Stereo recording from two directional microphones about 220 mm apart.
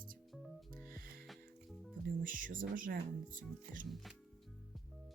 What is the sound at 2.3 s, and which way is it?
Speech, 40° right (ahead or behind).